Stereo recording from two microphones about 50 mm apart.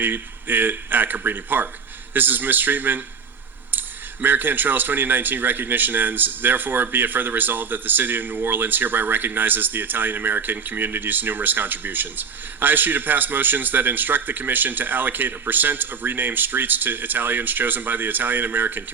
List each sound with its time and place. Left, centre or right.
0.0 s speech: right